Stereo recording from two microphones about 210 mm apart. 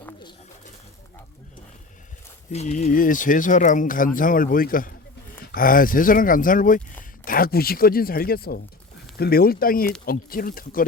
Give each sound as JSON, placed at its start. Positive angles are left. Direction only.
{"t": 2.5, "sound": "speech", "side_deg": 30}